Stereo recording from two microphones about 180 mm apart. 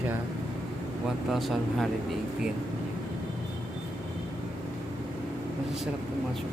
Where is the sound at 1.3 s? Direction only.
Centre (ahead or behind).